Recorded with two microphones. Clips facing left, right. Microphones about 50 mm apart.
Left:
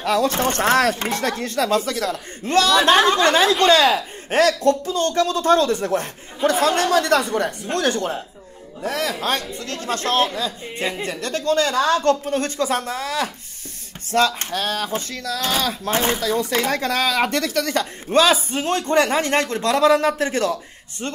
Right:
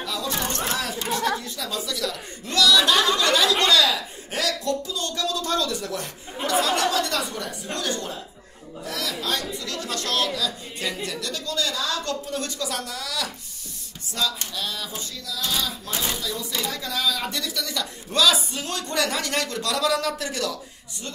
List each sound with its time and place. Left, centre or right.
0.0 s speech: left
14.1 s speech: left